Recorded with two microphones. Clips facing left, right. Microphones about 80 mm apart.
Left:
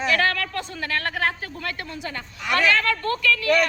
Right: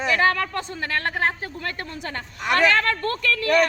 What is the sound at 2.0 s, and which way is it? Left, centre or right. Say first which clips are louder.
A woman's voice: right 2 dB; right.